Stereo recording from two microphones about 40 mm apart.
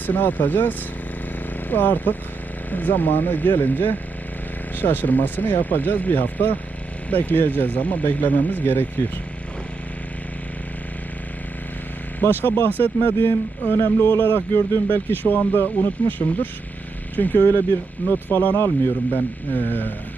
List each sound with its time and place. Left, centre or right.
0.0 s speech: left
12.2 s speech: left
17.3 s speech: left